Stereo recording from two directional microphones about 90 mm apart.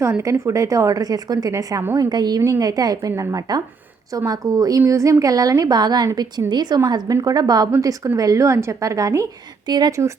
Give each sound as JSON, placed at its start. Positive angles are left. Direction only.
{"t": 0.0, "sound": "a woman's voice", "side_deg": -35}
{"t": 2.0, "sound": "speech", "side_deg": -50}
{"t": 2.4, "sound": "a woman's voice", "side_deg": -40}
{"t": 9.6, "sound": "speech", "side_deg": -50}